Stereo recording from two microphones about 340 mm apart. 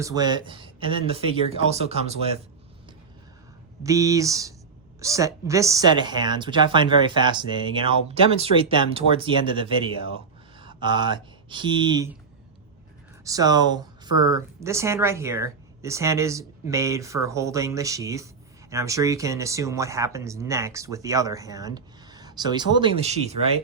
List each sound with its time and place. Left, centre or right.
0.0 s speech: centre
3.8 s speech: centre
13.2 s speech: centre